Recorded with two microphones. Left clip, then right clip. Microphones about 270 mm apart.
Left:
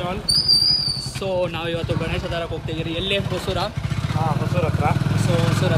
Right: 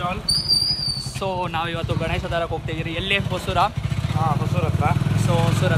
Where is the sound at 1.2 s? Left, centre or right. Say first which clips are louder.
Left 1 dB; centre.